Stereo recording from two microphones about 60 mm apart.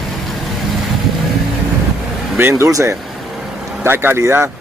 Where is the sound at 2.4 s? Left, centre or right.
Right.